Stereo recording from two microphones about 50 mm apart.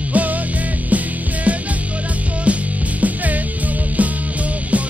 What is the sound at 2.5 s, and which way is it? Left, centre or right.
Music, right.